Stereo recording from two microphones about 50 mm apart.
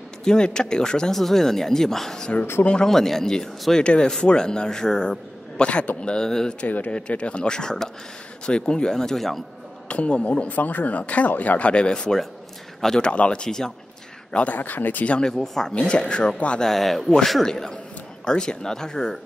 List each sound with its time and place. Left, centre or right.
0.2 s a man's voice: centre
2.6 s speech: left
2.9 s a man's voice: centre
9.8 s a man's voice: left
13.1 s a man's voice: left
14.3 s speech: left
15.0 s speech: centre
15.3 s a man's voice: centre
15.7 s speech: centre
16.6 s a man's voice: centre